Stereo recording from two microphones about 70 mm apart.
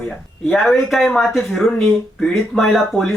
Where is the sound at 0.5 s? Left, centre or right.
Centre.